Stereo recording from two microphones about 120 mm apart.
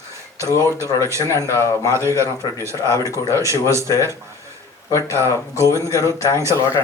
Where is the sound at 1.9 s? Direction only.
25° right (ahead or behind).